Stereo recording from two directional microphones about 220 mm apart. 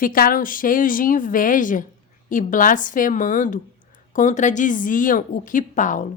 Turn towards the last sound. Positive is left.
turn(degrees=35)  # may be behind; listen again after turning